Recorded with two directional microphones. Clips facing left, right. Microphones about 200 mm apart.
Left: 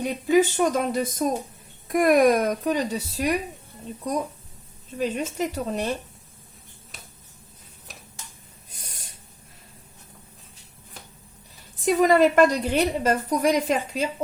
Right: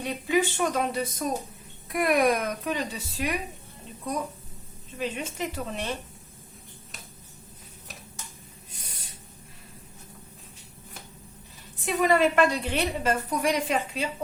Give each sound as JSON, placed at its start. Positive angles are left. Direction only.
{"t": 0.3, "sound": "speech", "side_deg": 40}
{"t": 4.9, "sound": "a woman's voice", "side_deg": 40}
{"t": 11.9, "sound": "a woman's voice", "side_deg": 40}